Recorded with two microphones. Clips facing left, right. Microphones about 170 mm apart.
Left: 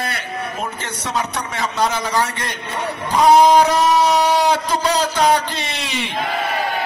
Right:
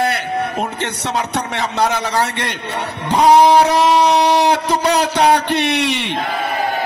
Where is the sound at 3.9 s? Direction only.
65° right (ahead or behind).